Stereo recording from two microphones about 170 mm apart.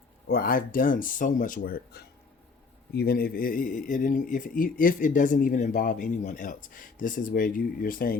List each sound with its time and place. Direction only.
0.3 s speech: 60° left (ahead or behind)